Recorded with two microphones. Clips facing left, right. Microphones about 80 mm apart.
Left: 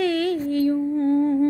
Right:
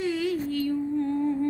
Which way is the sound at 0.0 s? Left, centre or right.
Left.